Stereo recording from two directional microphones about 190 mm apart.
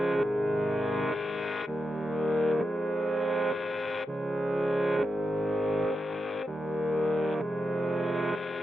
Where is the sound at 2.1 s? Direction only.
Centre (ahead or behind).